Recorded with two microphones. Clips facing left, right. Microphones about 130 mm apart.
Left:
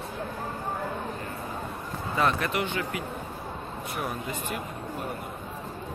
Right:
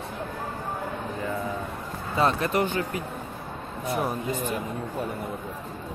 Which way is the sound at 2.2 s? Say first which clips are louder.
Right 3 dB; 30° right (ahead or behind).